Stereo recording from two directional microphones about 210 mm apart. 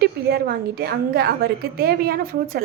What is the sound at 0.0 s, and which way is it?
A woman's voice, 50° right (ahead or behind).